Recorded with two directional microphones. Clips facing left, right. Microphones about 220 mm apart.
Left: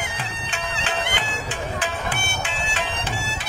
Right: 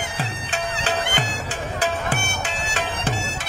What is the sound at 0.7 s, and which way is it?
Bagpipes, 45° right (ahead or behind).